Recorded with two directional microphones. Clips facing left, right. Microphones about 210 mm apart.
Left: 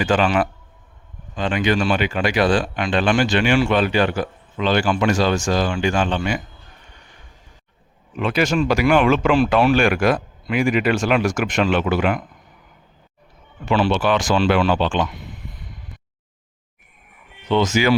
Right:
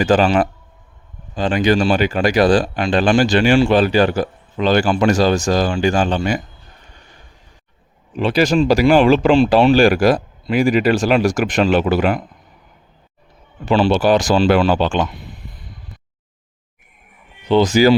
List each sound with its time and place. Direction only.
0.0 s speech: 40° right (ahead or behind)
8.1 s speech: 35° right (ahead or behind)
13.7 s speech: 35° right (ahead or behind)
17.5 s speech: 35° right (ahead or behind)